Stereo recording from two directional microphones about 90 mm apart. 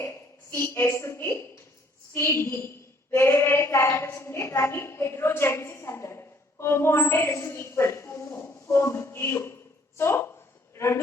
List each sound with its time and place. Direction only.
0.0 s a woman's voice: 30° left (ahead or behind)